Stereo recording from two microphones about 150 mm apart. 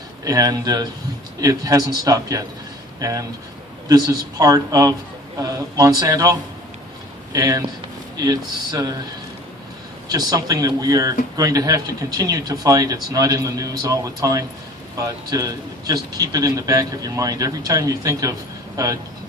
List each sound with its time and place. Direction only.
0.3 s speech: 25° right (ahead or behind)
7.3 s speech: 25° right (ahead or behind)
10.1 s speech: 25° right (ahead or behind)